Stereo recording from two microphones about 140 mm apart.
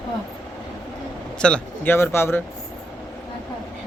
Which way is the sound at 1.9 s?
15° left (ahead or behind).